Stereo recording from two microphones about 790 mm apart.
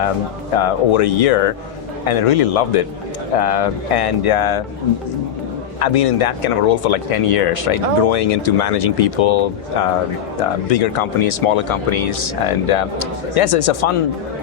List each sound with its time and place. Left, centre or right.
0.5 s speech: left
5.8 s speech: left